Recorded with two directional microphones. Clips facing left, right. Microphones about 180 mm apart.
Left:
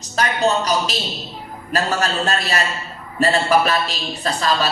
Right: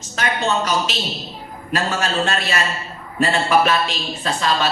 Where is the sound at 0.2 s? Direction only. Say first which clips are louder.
Left 2 dB; 40° left (ahead or behind).